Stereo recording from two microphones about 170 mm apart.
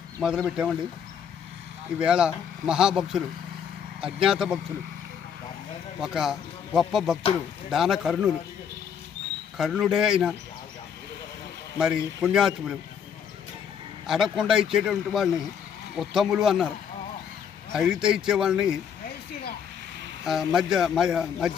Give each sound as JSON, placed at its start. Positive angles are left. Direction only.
{"t": 0.2, "sound": "speech", "side_deg": -5}
{"t": 2.0, "sound": "speech", "side_deg": -5}
{"t": 6.0, "sound": "speech", "side_deg": -5}
{"t": 9.6, "sound": "speech", "side_deg": -5}
{"t": 11.8, "sound": "speech", "side_deg": -5}
{"t": 14.1, "sound": "speech", "side_deg": 0}
{"t": 17.7, "sound": "speech", "side_deg": -5}
{"t": 20.2, "sound": "speech", "side_deg": 0}